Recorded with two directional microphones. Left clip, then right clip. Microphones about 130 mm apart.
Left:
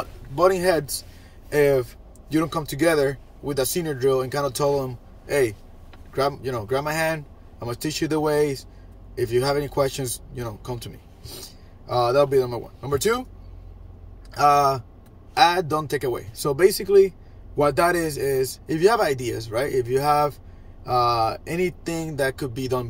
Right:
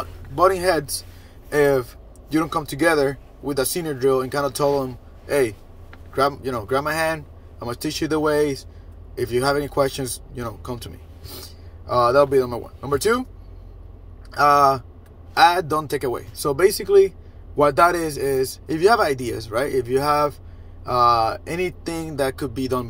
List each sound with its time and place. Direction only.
0.4 s speech: 20° left (ahead or behind)
14.3 s speech: 20° left (ahead or behind)